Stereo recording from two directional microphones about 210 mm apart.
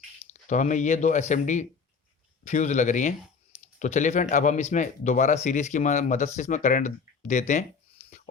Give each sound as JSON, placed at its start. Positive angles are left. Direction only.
{"t": 0.4, "sound": "speech", "side_deg": 35}